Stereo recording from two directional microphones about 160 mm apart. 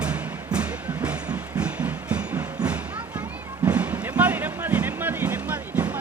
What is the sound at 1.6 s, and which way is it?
Train, 10° right (ahead or behind).